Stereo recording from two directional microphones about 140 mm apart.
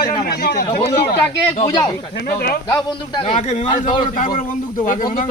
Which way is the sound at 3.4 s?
55° left (ahead or behind).